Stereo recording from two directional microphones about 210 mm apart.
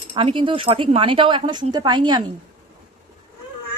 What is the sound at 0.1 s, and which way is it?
Speech, 25° right (ahead or behind).